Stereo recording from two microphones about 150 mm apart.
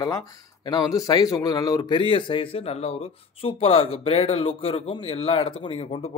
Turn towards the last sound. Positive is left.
turn(degrees=40)  # may be behind; listen again after turning